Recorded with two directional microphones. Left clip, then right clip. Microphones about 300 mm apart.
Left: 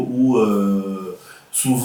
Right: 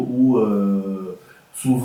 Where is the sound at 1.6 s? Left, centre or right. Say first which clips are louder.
Even; centre.